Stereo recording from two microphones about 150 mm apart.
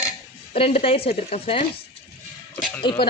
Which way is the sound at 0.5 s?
40° left (ahead or behind).